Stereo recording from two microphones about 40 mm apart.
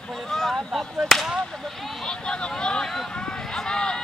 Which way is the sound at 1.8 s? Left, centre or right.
Centre.